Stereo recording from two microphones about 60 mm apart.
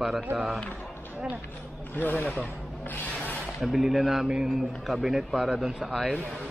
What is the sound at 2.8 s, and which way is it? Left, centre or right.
Rub, left.